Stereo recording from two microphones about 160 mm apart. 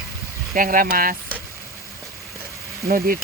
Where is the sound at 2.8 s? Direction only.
60° right (ahead or behind).